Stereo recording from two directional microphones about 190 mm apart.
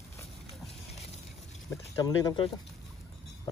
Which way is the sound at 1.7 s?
15° left (ahead or behind).